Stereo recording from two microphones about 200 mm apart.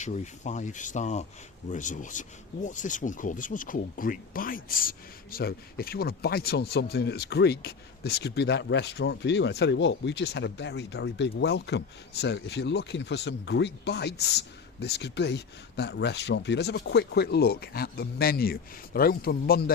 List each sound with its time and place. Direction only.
0.0 s speech: 35° left (ahead or behind)